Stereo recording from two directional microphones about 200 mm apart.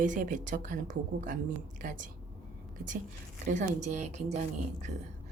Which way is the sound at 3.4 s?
35° right (ahead or behind).